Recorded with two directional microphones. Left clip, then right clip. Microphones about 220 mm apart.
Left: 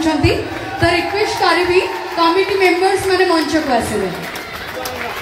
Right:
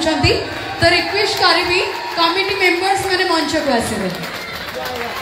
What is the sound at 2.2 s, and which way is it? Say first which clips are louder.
Speech: left 2 dB; 45° right (ahead or behind).